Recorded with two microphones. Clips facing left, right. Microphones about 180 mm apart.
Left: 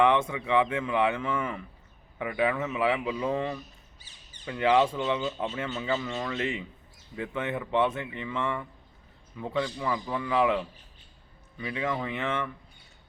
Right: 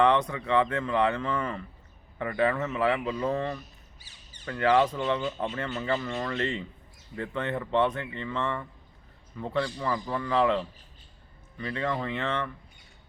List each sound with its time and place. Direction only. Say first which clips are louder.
0.0 s speech: even; 10° left (ahead or behind)